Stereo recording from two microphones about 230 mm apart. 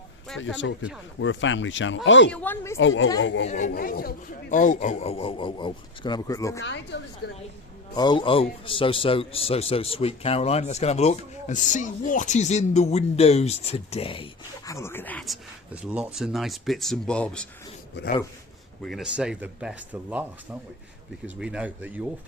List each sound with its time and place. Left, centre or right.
0.3 s speech: left
2.3 s speech: centre
2.7 s speech: left
3.4 s a man's voice: left; by 6.6 s centre
6.6 s speech: left
7.9 s a man's voice: centre
18.8 s speech: centre